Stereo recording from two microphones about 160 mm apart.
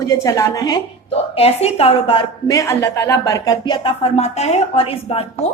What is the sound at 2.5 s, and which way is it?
Speech, 20° left (ahead or behind).